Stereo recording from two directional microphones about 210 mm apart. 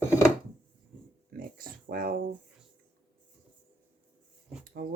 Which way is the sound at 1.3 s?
45° right (ahead or behind).